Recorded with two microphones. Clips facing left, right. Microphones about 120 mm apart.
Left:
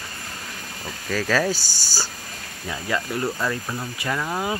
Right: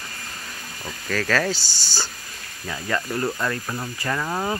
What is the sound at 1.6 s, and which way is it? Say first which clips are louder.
Speech: even; 45° left (ahead or behind).